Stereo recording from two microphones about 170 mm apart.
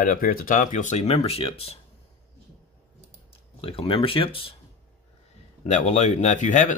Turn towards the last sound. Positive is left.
turn(degrees=45)  # may be behind; listen again after turning